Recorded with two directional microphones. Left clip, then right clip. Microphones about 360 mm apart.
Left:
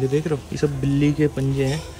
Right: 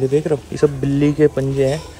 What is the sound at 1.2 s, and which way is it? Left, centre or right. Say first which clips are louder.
Speech: right 10 dB; centre.